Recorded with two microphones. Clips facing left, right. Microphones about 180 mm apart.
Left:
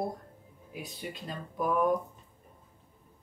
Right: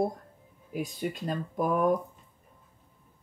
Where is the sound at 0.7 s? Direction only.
45° right (ahead or behind).